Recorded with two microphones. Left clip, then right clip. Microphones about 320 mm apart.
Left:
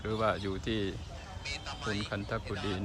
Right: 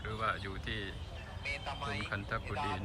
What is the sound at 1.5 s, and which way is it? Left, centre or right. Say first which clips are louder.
Speech: left 1 dB; right.